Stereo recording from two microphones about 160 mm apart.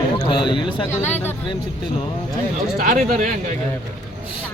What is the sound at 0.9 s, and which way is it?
Speech, 15° left (ahead or behind).